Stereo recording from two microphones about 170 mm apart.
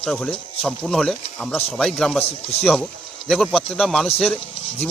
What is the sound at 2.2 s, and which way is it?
Speech, 35° left (ahead or behind).